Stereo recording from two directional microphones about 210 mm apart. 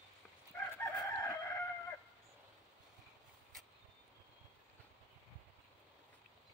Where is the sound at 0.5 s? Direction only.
10° left (ahead or behind).